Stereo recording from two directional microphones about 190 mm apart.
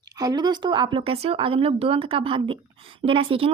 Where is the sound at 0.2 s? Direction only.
20° right (ahead or behind).